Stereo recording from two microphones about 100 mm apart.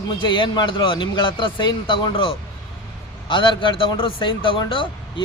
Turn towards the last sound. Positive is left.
turn(degrees=55)  # may be behind; listen again after turning